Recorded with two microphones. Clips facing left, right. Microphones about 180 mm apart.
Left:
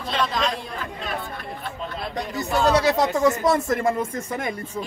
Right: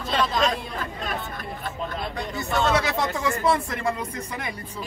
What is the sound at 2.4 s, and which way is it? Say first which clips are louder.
Speech: left 3 dB; 35° left (ahead or behind).